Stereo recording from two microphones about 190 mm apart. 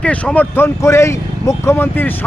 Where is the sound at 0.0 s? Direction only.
5° left (ahead or behind).